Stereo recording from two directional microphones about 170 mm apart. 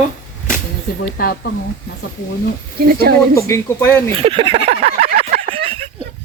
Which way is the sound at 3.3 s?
15° left (ahead or behind).